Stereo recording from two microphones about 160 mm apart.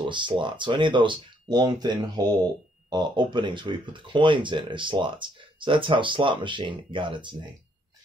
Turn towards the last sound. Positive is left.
turn(degrees=-30)  # may be behind; listen again after turning